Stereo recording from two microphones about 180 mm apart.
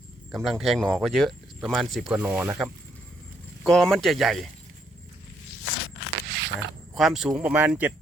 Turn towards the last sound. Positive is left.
turn(degrees=-10)  # may be behind; listen again after turning